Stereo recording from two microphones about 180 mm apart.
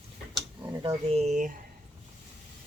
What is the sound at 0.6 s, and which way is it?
Speech, 30° right (ahead or behind).